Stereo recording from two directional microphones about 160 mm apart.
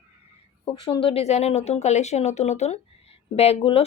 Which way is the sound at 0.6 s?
35° left (ahead or behind).